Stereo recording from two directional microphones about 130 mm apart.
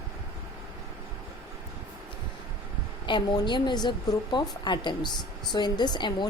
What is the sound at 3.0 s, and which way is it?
A woman's voice, 35° left (ahead or behind).